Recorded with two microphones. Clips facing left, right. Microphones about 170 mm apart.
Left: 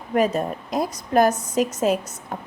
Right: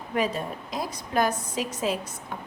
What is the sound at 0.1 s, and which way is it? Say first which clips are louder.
Speech: left 7 dB; 45° left (ahead or behind).